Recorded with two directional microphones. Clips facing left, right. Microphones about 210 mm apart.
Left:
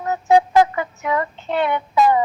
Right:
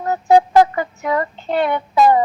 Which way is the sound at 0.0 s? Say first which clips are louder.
Right 2 dB; 35° right (ahead or behind).